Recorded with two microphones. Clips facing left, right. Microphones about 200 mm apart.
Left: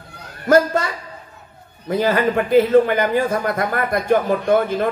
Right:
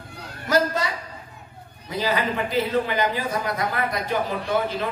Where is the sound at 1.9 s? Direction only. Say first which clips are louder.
Left 7 dB; 50° left (ahead or behind).